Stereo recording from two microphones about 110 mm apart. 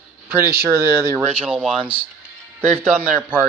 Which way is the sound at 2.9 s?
15° left (ahead or behind).